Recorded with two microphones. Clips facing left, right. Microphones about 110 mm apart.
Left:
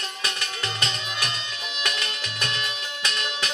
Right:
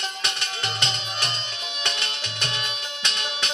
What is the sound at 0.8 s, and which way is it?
Music, 25° right (ahead or behind).